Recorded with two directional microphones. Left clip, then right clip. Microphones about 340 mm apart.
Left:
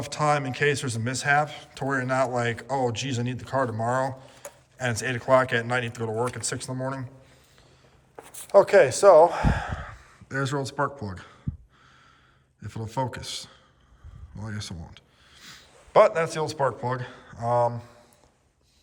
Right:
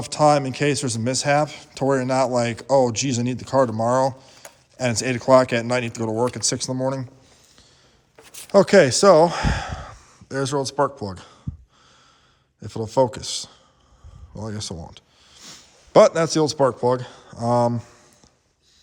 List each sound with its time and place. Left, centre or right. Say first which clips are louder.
0.0 s a man's voice: right 7 dB; centre
8.2 s speech: right 2 dB; right
12.6 s a man's voice: right 11 dB; centre